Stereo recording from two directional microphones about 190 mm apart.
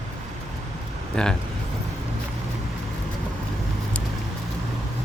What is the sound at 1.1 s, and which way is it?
Speech, 5° left (ahead or behind).